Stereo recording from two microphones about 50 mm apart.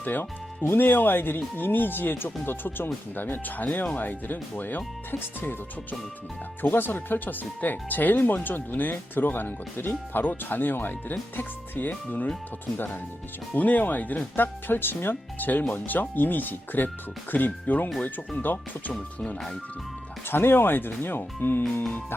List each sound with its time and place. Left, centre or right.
0.0 s speech: left
14.3 s speech: left
18.9 s speech: centre
20.2 s speech: left